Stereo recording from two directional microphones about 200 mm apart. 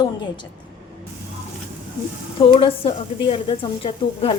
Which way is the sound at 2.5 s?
25° left (ahead or behind).